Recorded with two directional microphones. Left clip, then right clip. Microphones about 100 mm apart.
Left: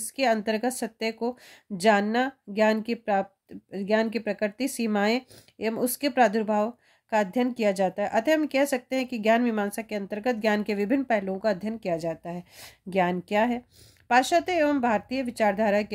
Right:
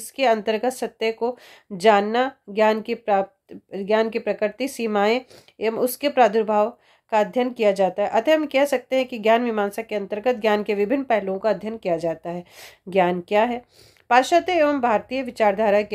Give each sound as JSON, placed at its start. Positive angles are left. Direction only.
{"t": 0.1, "sound": "speech", "side_deg": 30}